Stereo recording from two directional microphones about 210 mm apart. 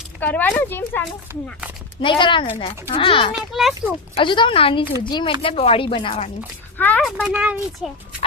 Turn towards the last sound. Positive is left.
turn(degrees=-5)  # may be behind; listen again after turning